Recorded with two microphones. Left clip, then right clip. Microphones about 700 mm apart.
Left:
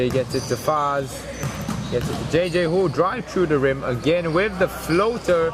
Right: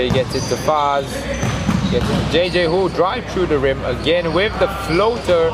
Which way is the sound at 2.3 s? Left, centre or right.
Left.